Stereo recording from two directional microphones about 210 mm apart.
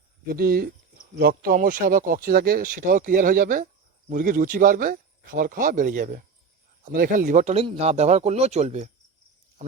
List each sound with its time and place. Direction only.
0.3 s speech: 45° right (ahead or behind)